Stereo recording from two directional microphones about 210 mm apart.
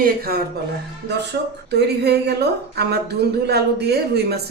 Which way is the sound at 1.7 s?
50° right (ahead or behind).